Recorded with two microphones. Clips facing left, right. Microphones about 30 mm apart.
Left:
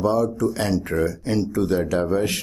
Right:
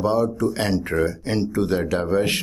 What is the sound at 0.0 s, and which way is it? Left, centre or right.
Speech, right.